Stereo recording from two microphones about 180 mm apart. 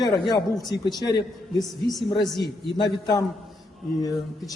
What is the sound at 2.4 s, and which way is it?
Speech, 25° left (ahead or behind).